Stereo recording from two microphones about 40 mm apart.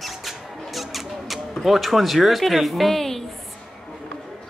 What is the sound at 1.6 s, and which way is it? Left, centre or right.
A woman's voice, centre.